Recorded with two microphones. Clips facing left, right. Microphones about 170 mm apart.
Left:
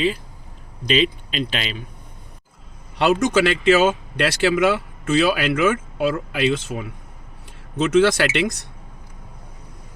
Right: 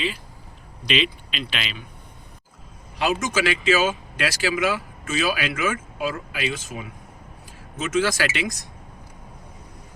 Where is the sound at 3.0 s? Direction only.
65° left (ahead or behind).